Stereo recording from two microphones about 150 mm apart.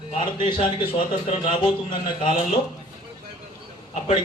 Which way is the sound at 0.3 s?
30° left (ahead or behind).